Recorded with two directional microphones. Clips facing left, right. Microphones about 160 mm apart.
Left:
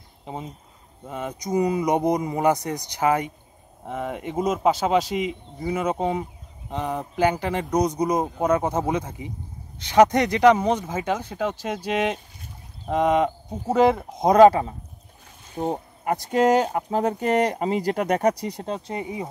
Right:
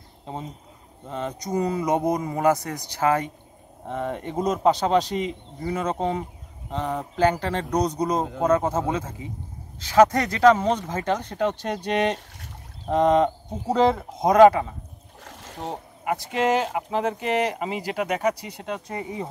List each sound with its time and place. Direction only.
1.0 s a man's voice: 10° left (ahead or behind)
14.2 s speech: 25° left (ahead or behind)
15.2 s boat: 90° right
15.6 s speech: 40° left (ahead or behind)